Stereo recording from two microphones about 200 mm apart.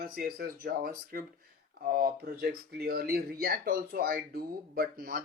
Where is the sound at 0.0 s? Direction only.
50° right (ahead or behind).